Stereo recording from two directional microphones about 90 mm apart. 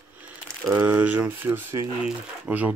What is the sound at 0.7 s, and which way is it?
Speech, 15° right (ahead or behind).